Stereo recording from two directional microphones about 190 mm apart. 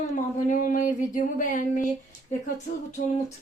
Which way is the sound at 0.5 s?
45° left (ahead or behind).